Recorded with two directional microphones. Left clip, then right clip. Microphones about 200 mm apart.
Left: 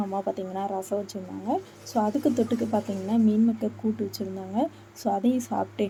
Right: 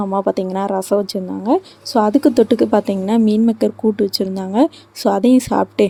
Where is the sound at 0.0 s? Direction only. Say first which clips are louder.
Right 11 dB; 45° right (ahead or behind).